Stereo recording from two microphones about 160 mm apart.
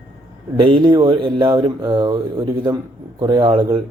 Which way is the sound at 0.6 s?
30° right (ahead or behind).